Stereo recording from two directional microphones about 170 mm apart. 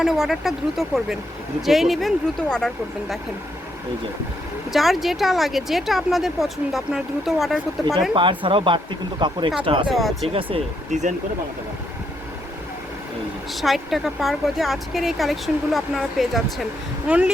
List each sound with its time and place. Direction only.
0.0 s speech: centre (ahead or behind)
4.7 s speech: centre (ahead or behind)
8.1 s speech: 30° right (ahead or behind)
9.9 s speech: centre (ahead or behind)
10.2 s speech: 35° right (ahead or behind)
13.5 s speech: centre (ahead or behind)